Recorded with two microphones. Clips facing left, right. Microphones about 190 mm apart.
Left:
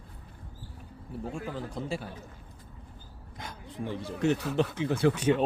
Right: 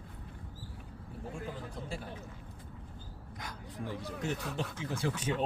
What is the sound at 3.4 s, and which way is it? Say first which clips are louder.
Speech: left 4 dB; 25° left (ahead or behind).